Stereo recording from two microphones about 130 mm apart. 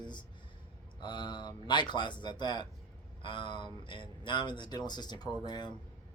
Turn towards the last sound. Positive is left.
turn(degrees=35)  # may be behind; listen again after turning